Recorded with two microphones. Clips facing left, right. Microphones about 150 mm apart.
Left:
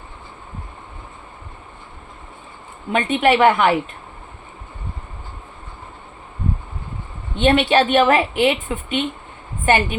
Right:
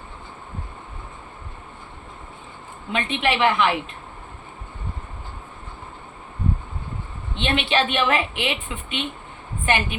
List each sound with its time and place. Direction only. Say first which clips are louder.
2.9 s a woman's voice: left 7 dB; 45° left (ahead or behind)
7.3 s a woman's voice: left 7 dB; 45° left (ahead or behind)